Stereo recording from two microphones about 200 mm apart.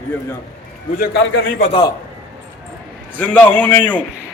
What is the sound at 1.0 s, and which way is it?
Speech, 60° left (ahead or behind).